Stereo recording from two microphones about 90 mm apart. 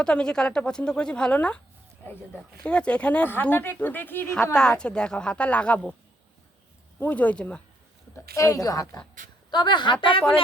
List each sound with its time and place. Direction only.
0.0 s speech: 10° left (ahead or behind)
2.6 s speech: 15° left (ahead or behind)
4.5 s speech: 10° left (ahead or behind)
7.0 s speech: 15° left (ahead or behind)
8.1 s a woman's voice: 35° left (ahead or behind)
9.5 s a woman's voice: 55° left (ahead or behind)